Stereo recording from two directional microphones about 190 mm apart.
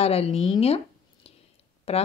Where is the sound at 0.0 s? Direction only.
30° left (ahead or behind).